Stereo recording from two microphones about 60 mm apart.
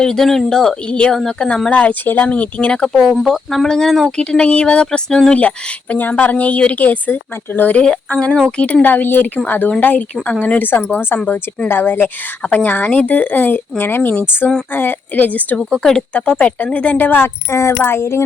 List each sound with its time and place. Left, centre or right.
0.0 s speech: centre
0.9 s speech: centre
1.1 s speech: centre
1.5 s speech: centre
1.8 s speech: left
3.2 s speech: centre; by 7.9 s left
8.1 s speech: centre
8.6 s speech: left
15.5 s speech: centre
16.1 s speech: left
17.2 s speech: left